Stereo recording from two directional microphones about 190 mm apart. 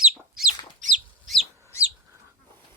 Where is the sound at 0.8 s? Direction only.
40° right (ahead or behind).